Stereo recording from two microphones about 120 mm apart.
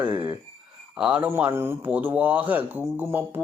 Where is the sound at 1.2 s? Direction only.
15° right (ahead or behind).